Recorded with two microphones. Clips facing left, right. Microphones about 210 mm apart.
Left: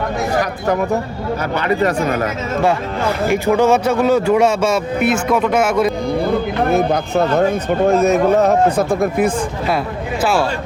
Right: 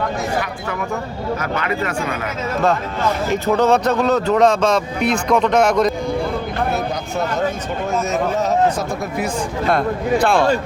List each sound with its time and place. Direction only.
1.5 s speech: 35° left (ahead or behind)
3.2 s speech: 10° left (ahead or behind)
6.7 s speech: 55° left (ahead or behind)
9.6 s a man's voice: 5° left (ahead or behind)